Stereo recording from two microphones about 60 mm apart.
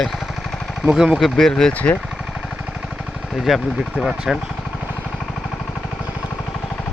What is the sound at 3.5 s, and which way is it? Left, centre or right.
Speech, centre.